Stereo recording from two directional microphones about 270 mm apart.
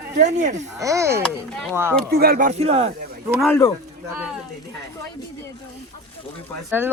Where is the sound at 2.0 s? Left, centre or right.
Right.